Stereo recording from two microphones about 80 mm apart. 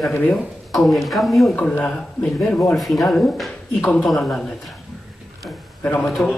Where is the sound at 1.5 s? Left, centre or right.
Centre.